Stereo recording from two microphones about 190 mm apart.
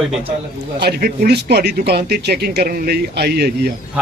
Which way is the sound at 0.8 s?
55° right (ahead or behind).